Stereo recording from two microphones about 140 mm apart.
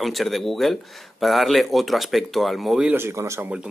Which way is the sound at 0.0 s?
Centre (ahead or behind).